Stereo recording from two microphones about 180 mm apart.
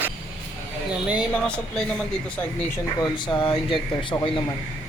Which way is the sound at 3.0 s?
25° left (ahead or behind).